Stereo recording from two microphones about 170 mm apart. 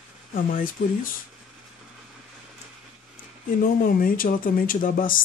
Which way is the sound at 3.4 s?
60° left (ahead or behind).